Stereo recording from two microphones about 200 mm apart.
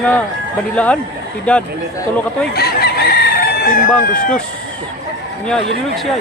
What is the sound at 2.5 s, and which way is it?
Chicken, 50° left (ahead or behind).